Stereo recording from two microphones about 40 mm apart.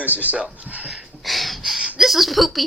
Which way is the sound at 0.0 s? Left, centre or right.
Right.